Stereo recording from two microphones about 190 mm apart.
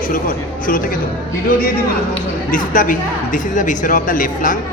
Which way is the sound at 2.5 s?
45° left (ahead or behind).